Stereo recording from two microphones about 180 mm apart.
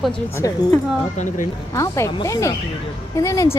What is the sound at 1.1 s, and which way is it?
Speech, 40° left (ahead or behind).